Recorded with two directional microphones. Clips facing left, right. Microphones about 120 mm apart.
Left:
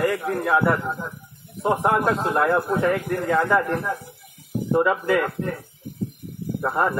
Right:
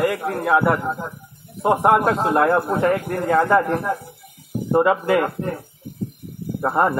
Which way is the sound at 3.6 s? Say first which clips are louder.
Right 3 dB; 20° right (ahead or behind).